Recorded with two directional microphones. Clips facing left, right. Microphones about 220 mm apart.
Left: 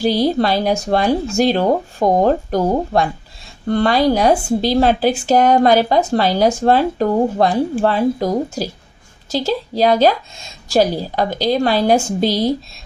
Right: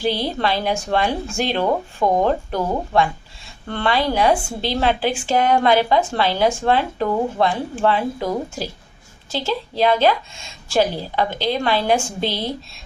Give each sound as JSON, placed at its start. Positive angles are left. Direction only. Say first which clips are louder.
{"t": 0.0, "sound": "speech", "louder": "left 6 dB", "side_deg": 40}